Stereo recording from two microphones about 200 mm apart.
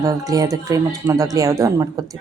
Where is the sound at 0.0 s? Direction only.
20° right (ahead or behind).